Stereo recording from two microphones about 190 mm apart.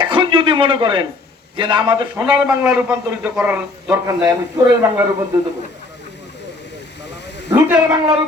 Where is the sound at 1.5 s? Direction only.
25° right (ahead or behind).